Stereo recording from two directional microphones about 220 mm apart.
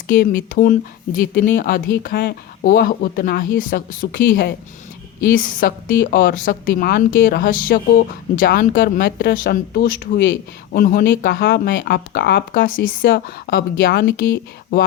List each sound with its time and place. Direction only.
0.1 s speech: 40° left (ahead or behind)